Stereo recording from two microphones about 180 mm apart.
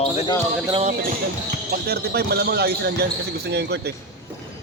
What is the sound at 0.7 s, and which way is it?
Speech, 35° right (ahead or behind).